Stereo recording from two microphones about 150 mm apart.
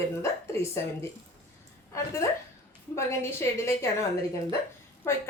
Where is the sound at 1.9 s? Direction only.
20° left (ahead or behind).